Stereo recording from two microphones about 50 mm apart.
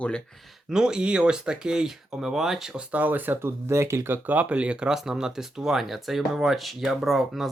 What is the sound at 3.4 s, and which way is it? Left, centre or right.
Speech, right.